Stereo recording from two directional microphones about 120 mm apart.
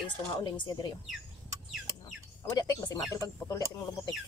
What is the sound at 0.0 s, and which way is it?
Speech, 40° left (ahead or behind).